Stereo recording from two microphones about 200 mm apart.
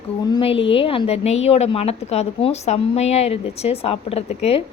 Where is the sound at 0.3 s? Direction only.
25° left (ahead or behind).